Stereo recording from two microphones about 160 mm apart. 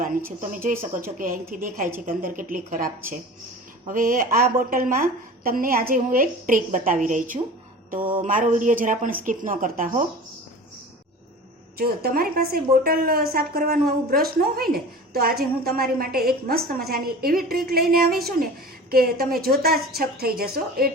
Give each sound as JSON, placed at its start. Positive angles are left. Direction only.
{"t": 0.5, "sound": "a woman's voice", "side_deg": -60}
{"t": 11.8, "sound": "a woman's voice", "side_deg": -65}